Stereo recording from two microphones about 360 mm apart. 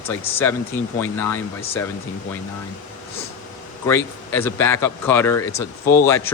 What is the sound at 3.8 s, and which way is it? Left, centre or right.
Speech, centre.